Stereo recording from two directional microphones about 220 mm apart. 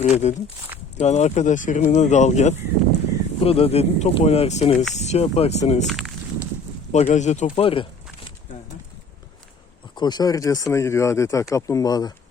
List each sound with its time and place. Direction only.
0.0 s speech: 30° left (ahead or behind)
5.9 s walk: centre (ahead or behind)
6.9 s speech: 30° left (ahead or behind)
9.9 s speech: 20° left (ahead or behind)